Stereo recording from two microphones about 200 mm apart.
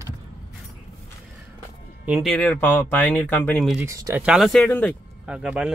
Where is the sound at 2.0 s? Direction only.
5° right (ahead or behind).